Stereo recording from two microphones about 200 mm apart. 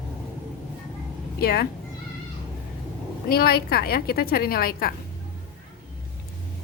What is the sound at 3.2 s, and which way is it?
A woman's voice, 50° left (ahead or behind).